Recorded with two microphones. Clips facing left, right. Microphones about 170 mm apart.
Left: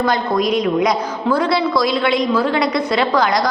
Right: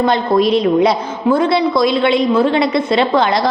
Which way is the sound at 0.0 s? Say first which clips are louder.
Right 4 dB; 25° right (ahead or behind).